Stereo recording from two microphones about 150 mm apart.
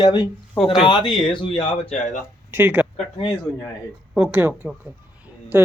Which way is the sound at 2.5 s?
15° right (ahead or behind).